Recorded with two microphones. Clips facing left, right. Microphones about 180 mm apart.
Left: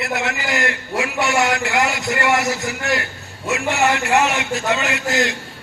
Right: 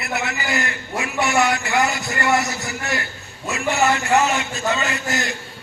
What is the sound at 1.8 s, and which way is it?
A man's voice, 90° left.